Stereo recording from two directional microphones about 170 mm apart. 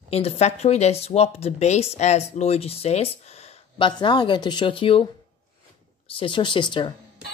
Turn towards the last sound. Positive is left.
turn(degrees=30)  # may be behind; listen again after turning